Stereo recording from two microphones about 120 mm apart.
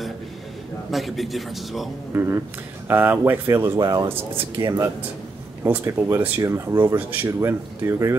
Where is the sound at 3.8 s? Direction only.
35° right (ahead or behind).